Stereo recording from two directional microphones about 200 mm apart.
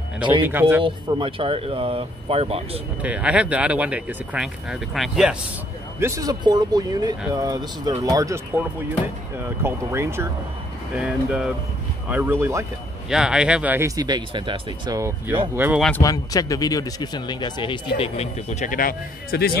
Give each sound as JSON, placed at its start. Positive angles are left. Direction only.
{"t": 0.5, "sound": "speech", "side_deg": -10}
{"t": 0.8, "sound": "speech", "side_deg": -25}
{"t": 3.0, "sound": "speech", "side_deg": -5}
{"t": 5.9, "sound": "speech", "side_deg": -15}
{"t": 9.4, "sound": "speech", "side_deg": -10}
{"t": 16.0, "sound": "speech", "side_deg": 15}